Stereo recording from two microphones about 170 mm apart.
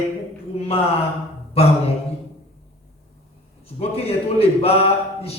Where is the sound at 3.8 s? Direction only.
35° left (ahead or behind).